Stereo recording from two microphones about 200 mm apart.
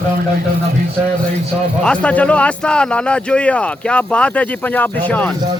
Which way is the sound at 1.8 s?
5° left (ahead or behind).